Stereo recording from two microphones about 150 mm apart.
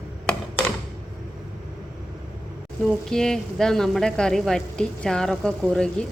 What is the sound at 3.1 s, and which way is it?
A woman's voice, 5° left (ahead or behind).